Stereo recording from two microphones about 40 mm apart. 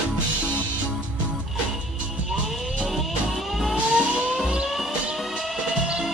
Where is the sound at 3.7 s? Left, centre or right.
Right.